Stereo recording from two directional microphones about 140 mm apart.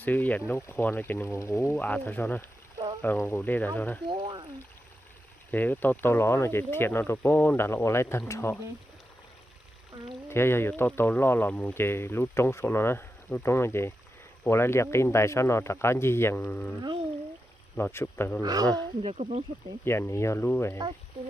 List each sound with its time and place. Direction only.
0.0 s speech: 10° left (ahead or behind)
4.1 s speech: 35° right (ahead or behind)
5.5 s speech: 15° left (ahead or behind)
10.2 s speech: 15° left (ahead or behind)
17.9 s speech: 15° left (ahead or behind)
18.4 s speech: 25° right (ahead or behind)
19.0 s speech: 50° right (ahead or behind)
19.8 s speech: 20° left (ahead or behind)